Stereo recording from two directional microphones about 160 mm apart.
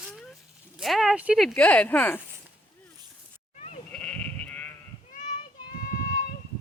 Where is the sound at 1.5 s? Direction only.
10° left (ahead or behind).